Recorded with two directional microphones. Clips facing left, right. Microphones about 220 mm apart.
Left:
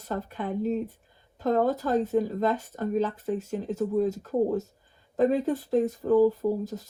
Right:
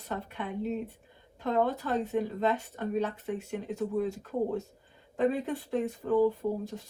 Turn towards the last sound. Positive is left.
turn(degrees=40)  # may be behind; listen again after turning